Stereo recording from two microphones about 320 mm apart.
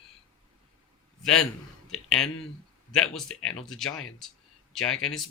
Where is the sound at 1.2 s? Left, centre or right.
Centre.